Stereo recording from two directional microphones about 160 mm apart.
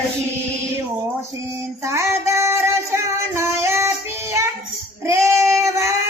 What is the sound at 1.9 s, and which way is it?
Music, 20° right (ahead or behind).